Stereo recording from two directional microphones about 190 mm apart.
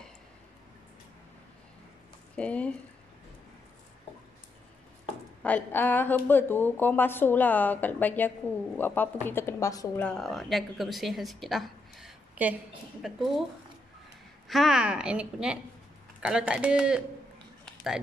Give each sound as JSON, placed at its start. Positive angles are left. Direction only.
{"t": 2.3, "sound": "speech", "side_deg": 5}
{"t": 5.4, "sound": "speech", "side_deg": 10}
{"t": 10.0, "sound": "a woman's voice", "side_deg": 0}
{"t": 14.5, "sound": "a woman's voice", "side_deg": 0}
{"t": 17.6, "sound": "a sound", "side_deg": 0}